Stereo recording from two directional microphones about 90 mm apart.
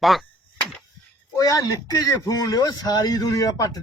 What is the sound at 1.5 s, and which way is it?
A man's voice, 40° left (ahead or behind).